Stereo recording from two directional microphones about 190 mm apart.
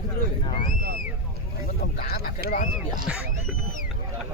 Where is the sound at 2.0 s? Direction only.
45° left (ahead or behind).